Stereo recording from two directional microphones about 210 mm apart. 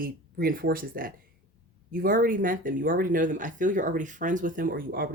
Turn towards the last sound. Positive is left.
turn(degrees=-45)  # may be behind; listen again after turning